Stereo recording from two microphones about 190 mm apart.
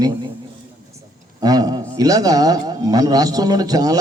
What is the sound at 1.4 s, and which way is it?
A man's voice, 20° right (ahead or behind).